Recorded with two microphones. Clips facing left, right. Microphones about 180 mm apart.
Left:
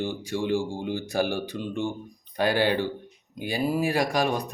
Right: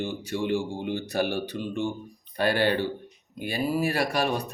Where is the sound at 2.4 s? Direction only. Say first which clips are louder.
Left 1 dB; 10° left (ahead or behind).